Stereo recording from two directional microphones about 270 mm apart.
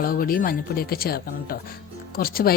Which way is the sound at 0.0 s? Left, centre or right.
Left.